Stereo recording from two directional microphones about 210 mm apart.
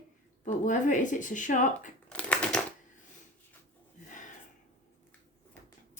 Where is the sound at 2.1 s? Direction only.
5° left (ahead or behind).